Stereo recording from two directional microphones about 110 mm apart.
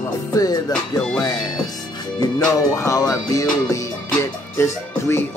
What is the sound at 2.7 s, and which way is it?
Speech, 30° left (ahead or behind).